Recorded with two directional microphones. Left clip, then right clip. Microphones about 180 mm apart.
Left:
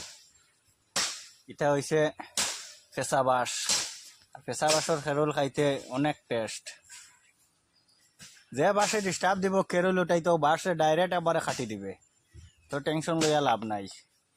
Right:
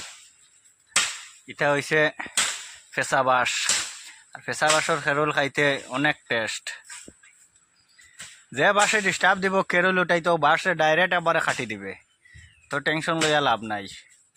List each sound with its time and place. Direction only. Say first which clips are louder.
1.5 s speech: right 5 dB; 15° right (ahead or behind)
8.5 s speech: right 6 dB; 15° right (ahead or behind)